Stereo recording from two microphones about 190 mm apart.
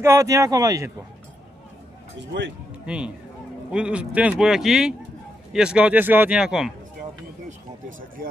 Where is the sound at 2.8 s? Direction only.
5° right (ahead or behind).